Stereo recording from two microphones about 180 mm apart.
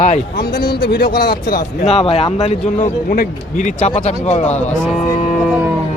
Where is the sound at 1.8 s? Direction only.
35° left (ahead or behind).